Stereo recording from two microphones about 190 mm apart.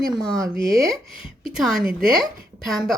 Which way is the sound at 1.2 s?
Centre (ahead or behind).